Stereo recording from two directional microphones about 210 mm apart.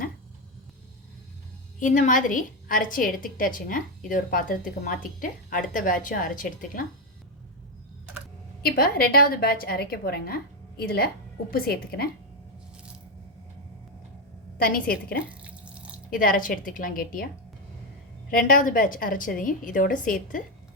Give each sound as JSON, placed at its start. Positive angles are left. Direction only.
{"t": 1.8, "sound": "a woman's voice", "side_deg": 35}
{"t": 8.6, "sound": "a woman's voice", "side_deg": 45}
{"t": 14.6, "sound": "a woman's voice", "side_deg": 45}
{"t": 15.3, "sound": "water", "side_deg": -5}
{"t": 16.0, "sound": "a woman's voice", "side_deg": 40}
{"t": 18.3, "sound": "a woman's voice", "side_deg": 40}